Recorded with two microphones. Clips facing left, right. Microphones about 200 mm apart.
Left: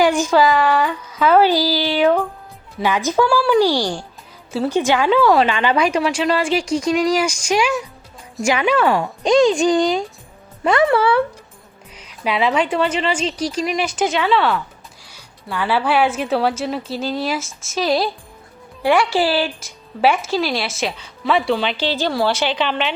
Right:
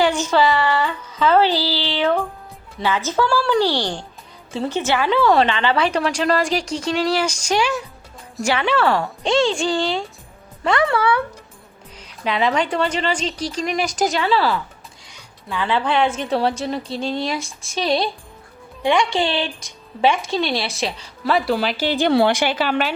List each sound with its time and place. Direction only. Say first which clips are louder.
0.0 s speech: left 3 dB; 10° left (ahead or behind)
5.3 s a woman's voice: left 1 dB; centre (ahead or behind)
5.5 s speech: left 2 dB; 15° left (ahead or behind)
8.5 s speech: left 2 dB; 15° left (ahead or behind)
9.4 s speech: left 6 dB; 30° right (ahead or behind)
10.6 s speech: left 3 dB; 20° left (ahead or behind)
12.2 s a woman's voice: left 1 dB; 5° left (ahead or behind)
12.8 s a woman's voice: left 2 dB; 35° right (ahead or behind)
13.5 s a woman's voice: left 2 dB; 5° left (ahead or behind); by 22.0 s 10° right (ahead or behind)
22.0 s a woman's voice: right 5 dB; 65° right (ahead or behind)
22.3 s a woman's voice: right 1 dB; 10° right (ahead or behind)